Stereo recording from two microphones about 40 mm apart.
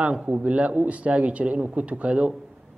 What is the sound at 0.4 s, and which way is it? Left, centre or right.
A man's voice, right.